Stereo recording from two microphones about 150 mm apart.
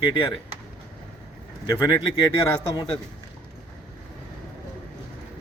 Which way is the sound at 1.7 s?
20° left (ahead or behind).